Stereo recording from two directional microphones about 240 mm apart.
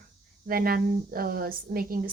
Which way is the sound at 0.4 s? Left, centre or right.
Right.